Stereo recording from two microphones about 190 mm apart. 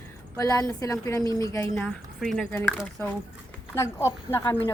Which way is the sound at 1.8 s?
Centre (ahead or behind).